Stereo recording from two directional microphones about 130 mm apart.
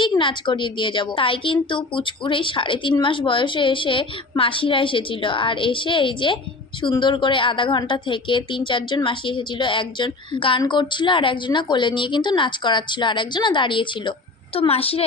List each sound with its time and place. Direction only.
0.0 s a woman's voice: 40° left (ahead or behind)